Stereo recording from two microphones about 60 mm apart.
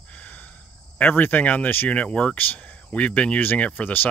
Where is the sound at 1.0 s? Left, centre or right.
Left.